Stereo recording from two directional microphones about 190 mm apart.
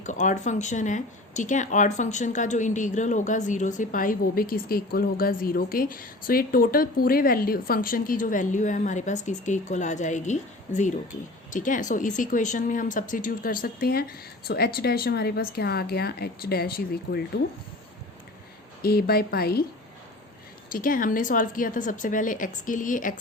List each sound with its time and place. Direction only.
0.0 s speech: 40° left (ahead or behind)
18.8 s a woman's voice: 55° left (ahead or behind)
20.7 s speech: 45° left (ahead or behind)